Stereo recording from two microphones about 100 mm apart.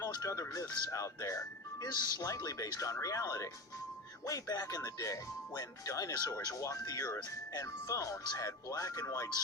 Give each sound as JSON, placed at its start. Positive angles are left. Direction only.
{"t": 0.2, "sound": "speech", "side_deg": 30}